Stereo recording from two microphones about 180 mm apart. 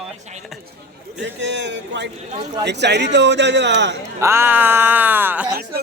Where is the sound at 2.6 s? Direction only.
70° right (ahead or behind).